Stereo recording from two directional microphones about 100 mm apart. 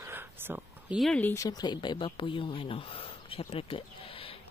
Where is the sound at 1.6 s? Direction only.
50° left (ahead or behind); by 4.3 s 65° left (ahead or behind).